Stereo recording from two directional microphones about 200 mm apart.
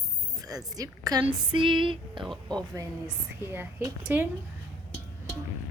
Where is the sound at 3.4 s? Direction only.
10° right (ahead or behind).